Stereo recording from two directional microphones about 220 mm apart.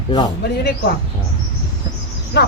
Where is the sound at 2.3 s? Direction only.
50° left (ahead or behind).